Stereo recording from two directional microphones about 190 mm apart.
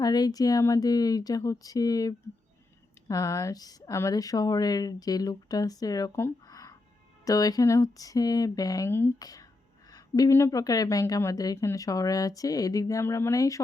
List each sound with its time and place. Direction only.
0.0 s a woman's voice: 20° left (ahead or behind)